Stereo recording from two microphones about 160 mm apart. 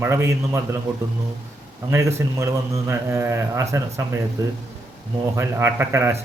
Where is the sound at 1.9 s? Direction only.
15° right (ahead or behind).